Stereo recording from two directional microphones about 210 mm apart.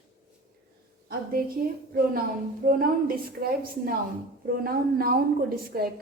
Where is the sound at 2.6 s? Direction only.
45° right (ahead or behind).